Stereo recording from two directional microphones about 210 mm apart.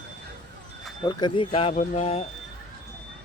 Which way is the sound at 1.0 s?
20° left (ahead or behind).